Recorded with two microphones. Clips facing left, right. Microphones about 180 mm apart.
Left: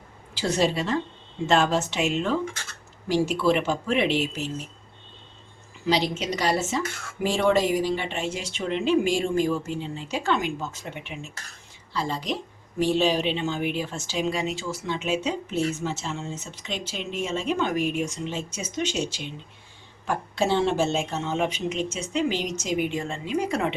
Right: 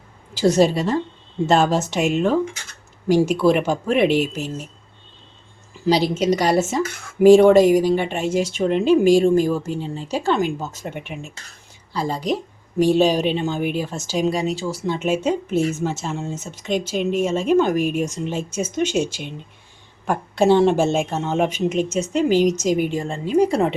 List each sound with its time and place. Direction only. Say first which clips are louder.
0.3 s speech: right 8 dB; 40° right (ahead or behind)
5.8 s speech: right 7 dB; 40° right (ahead or behind)
11.9 s speech: right 6 dB; 40° right (ahead or behind)